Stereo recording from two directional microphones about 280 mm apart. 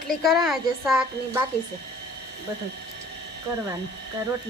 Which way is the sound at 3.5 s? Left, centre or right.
Centre.